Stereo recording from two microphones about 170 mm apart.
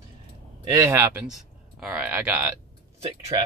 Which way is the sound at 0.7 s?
20° right (ahead or behind).